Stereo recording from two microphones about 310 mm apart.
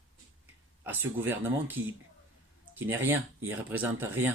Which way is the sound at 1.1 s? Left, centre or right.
Centre.